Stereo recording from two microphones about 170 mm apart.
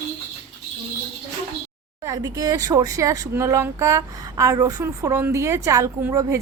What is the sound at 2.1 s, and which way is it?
Speech, 20° right (ahead or behind).